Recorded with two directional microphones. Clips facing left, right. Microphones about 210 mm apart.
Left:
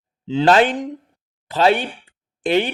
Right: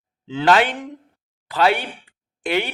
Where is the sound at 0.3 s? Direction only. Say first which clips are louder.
Left 3 dB; 25° left (ahead or behind).